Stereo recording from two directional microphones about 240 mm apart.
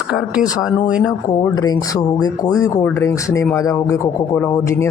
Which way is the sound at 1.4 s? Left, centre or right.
Centre.